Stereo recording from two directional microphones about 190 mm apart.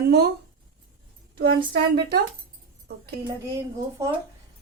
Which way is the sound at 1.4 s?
55° right (ahead or behind).